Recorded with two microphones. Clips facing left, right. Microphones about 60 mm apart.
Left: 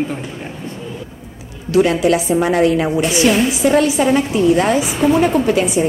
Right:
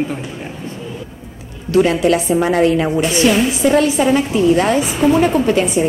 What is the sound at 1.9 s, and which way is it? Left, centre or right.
Speech, right.